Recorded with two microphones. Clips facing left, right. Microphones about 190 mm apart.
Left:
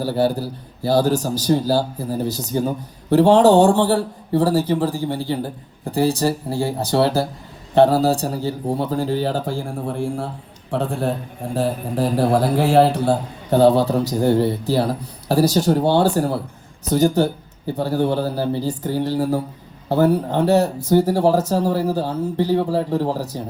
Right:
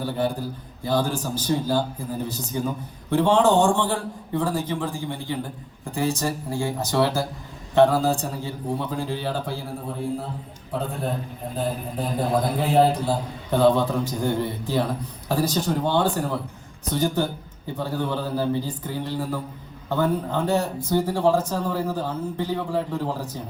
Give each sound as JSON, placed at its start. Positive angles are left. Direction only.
{"t": 0.0, "sound": "a man's voice", "side_deg": 35}
{"t": 9.8, "sound": "a man's voice", "side_deg": 75}
{"t": 13.5, "sound": "a man's voice", "side_deg": 40}